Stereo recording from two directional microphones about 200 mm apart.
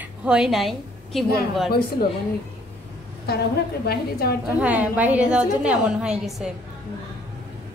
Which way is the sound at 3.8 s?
50° left (ahead or behind).